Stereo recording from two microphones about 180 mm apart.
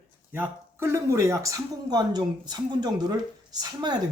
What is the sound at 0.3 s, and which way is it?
Speech, 10° right (ahead or behind).